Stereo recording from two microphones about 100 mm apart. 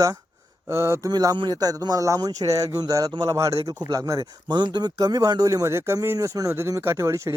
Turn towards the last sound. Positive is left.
turn(degrees=-30)  # may be behind; listen again after turning